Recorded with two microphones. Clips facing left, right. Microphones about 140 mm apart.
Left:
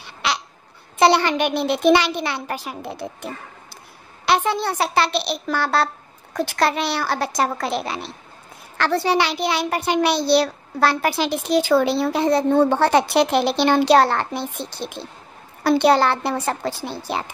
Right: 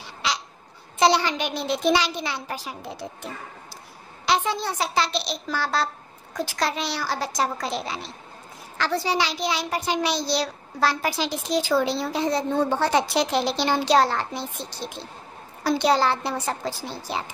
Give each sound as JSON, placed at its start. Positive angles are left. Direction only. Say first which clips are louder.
{"t": 0.0, "sound": "a sound", "louder": "left 4 dB", "side_deg": 60}
{"t": 0.9, "sound": "a child's voice", "louder": "left 4 dB", "side_deg": 60}
{"t": 4.3, "sound": "a child's voice", "louder": "left 4 dB", "side_deg": 60}